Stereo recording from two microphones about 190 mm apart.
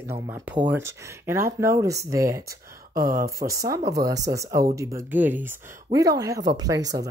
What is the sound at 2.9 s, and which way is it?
Speech, 50° right (ahead or behind).